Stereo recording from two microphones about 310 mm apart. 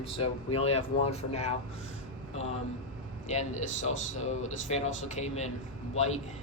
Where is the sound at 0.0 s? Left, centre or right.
Centre.